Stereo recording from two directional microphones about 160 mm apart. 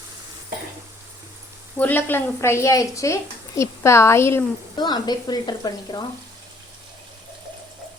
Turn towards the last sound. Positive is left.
turn(degrees=25)  # may be behind; listen again after turning